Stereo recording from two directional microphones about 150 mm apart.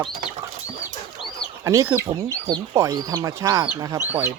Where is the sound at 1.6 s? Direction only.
20° right (ahead or behind).